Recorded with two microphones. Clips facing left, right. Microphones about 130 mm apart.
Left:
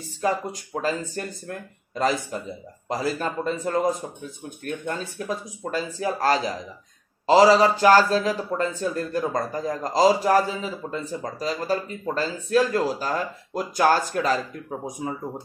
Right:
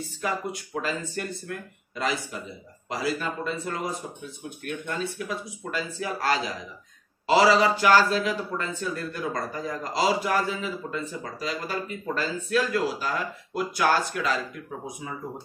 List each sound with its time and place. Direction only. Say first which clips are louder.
0.2 s a man's voice: left 5 dB; 35° left (ahead or behind)